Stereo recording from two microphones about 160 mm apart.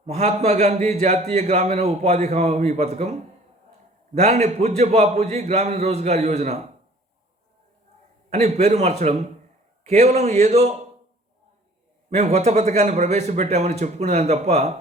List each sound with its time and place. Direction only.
0.0 s a man's voice: 40° right (ahead or behind)
4.2 s a man's voice: 45° right (ahead or behind)
8.3 s a man's voice: 45° right (ahead or behind)
12.1 s a man's voice: 45° right (ahead or behind)